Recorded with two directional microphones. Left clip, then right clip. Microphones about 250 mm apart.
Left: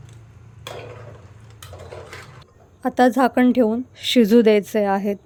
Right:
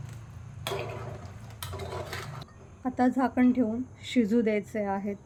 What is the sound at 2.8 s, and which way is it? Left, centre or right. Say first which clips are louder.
A woman's voice: left 11 dB; left.